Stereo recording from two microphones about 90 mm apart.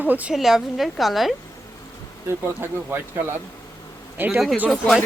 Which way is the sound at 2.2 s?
25° right (ahead or behind).